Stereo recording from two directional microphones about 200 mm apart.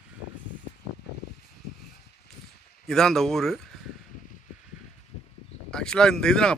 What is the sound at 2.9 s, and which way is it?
Speech, centre (ahead or behind).